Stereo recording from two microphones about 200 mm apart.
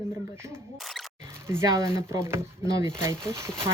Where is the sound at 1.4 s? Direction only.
15° right (ahead or behind).